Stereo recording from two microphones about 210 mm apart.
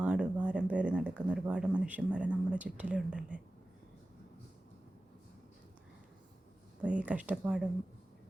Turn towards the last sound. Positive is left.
turn(degrees=-5)  # may be behind; listen again after turning